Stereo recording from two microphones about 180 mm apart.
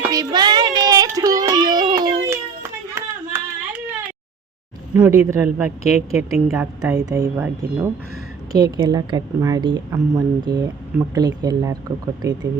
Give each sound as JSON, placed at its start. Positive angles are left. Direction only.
{"t": 0.1, "sound": "child singing", "side_deg": -20}
{"t": 4.9, "sound": "speech", "side_deg": -15}
{"t": 8.5, "sound": "a woman's voice", "side_deg": -20}